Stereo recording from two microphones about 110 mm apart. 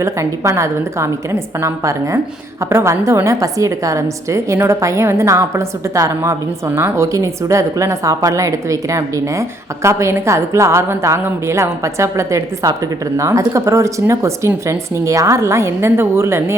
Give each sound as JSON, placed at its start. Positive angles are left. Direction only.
{"t": 0.0, "sound": "a woman's voice", "side_deg": -25}